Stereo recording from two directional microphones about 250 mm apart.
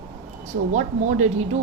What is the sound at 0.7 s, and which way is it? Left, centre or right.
Speech, right.